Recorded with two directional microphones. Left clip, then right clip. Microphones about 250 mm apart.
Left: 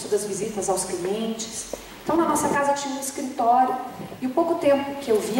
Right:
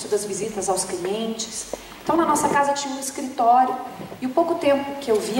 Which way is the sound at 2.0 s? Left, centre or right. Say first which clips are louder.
Right 2 dB; centre.